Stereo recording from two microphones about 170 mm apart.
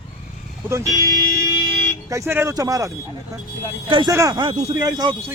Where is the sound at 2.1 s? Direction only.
15° right (ahead or behind).